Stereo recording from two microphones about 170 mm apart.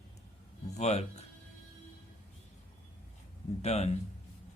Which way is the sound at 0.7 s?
40° left (ahead or behind).